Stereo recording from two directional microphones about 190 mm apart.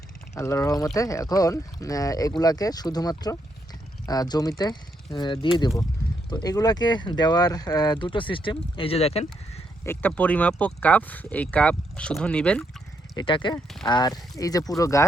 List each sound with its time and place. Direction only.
0.3 s speech: 15° left (ahead or behind); by 9.2 s 35° left (ahead or behind)
9.8 s speech: 10° left (ahead or behind)
13.1 s speech: 25° left (ahead or behind)